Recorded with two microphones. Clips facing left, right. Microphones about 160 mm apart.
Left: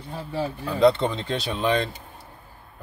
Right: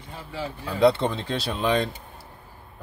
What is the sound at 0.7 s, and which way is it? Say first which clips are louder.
Speech: left 1 dB; 5° right (ahead or behind).